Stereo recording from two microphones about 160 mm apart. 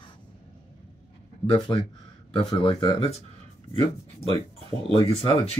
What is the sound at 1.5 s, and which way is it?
Speech, 30° left (ahead or behind).